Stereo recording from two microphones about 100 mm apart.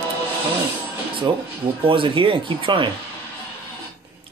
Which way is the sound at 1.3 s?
50° right (ahead or behind).